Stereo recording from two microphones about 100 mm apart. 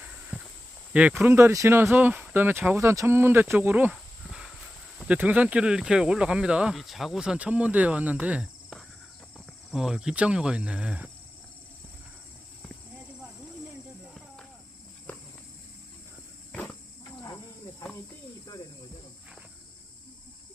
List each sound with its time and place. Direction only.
0.0 s a sound: 10° right (ahead or behind)
1.2 s speech: 25° right (ahead or behind)
3.9 s a sound: centre (ahead or behind)
4.9 s speech: 10° right (ahead or behind)
9.7 s speech: 5° right (ahead or behind)
16.5 s insect: 15° left (ahead or behind)